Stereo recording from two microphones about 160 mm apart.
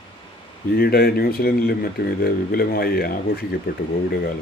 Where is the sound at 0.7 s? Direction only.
75° left (ahead or behind).